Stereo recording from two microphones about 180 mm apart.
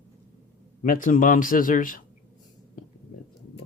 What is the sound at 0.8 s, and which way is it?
Speech, 45° left (ahead or behind).